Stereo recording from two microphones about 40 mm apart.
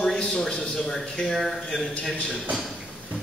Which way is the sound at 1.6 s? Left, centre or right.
Centre.